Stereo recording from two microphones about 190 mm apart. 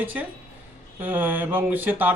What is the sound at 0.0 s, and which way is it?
Speech, 10° right (ahead or behind).